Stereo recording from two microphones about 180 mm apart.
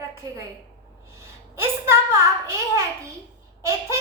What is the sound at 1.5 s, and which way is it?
A woman's voice, 15° right (ahead or behind).